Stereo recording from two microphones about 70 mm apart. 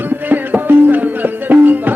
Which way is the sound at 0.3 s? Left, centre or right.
Right.